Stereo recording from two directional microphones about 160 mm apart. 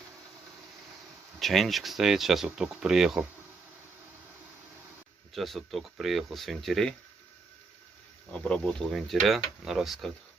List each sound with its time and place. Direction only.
1.4 s speech: centre (ahead or behind)
5.3 s speech: centre (ahead or behind)
8.3 s speech: 5° left (ahead or behind)